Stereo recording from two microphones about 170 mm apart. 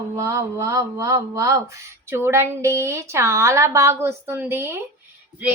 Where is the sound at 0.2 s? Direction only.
15° right (ahead or behind).